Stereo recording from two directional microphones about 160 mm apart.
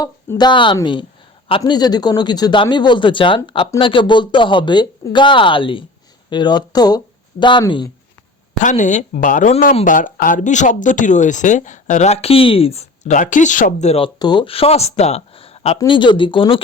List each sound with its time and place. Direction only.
0.0 s speech: 25° left (ahead or behind)
8.6 s speech: 50° left (ahead or behind)
14.2 s speech: 25° left (ahead or behind)